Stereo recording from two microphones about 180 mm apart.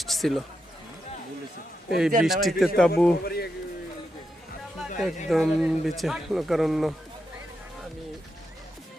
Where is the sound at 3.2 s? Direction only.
60° left (ahead or behind).